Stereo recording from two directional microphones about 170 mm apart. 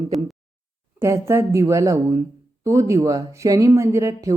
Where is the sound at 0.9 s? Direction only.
15° right (ahead or behind).